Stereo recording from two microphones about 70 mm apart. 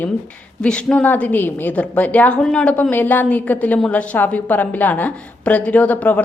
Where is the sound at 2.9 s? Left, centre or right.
Left.